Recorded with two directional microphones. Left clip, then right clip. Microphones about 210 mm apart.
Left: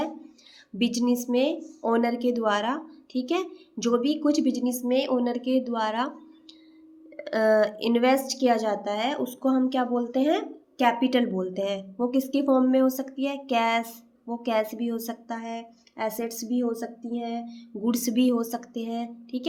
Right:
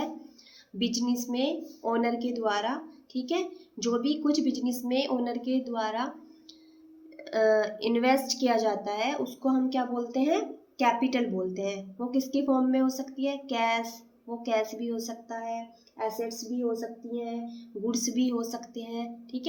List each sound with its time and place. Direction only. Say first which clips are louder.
0.8 s speech: left 4 dB; 35° left (ahead or behind)
7.3 s speech: left 3 dB; 35° left (ahead or behind)